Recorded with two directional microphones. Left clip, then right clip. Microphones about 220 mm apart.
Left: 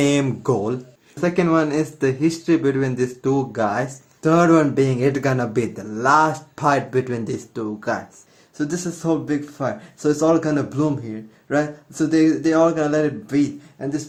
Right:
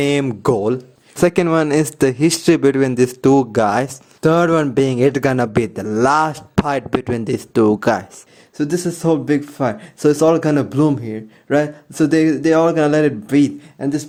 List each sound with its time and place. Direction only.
0.0 s speech: 40° right (ahead or behind)
1.2 s speech: 50° right (ahead or behind)
8.5 s speech: 30° right (ahead or behind)